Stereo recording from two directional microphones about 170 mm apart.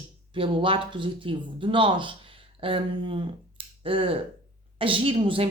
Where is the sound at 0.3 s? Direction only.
30° right (ahead or behind).